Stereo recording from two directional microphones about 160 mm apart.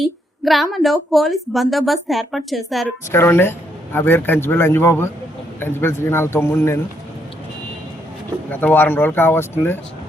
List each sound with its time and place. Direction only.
0.0 s speech: centre (ahead or behind)
3.1 s a man's voice: 15° left (ahead or behind)
8.4 s a man's voice: 10° left (ahead or behind)